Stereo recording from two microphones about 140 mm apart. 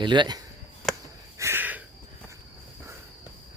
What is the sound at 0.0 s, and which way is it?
Speech, 35° right (ahead or behind).